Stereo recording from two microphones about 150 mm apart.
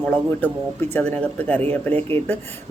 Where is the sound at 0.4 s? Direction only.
10° left (ahead or behind).